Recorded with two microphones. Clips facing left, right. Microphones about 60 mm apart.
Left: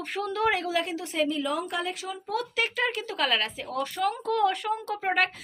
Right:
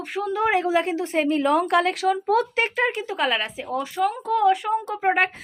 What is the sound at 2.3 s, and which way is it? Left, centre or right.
Speech, right.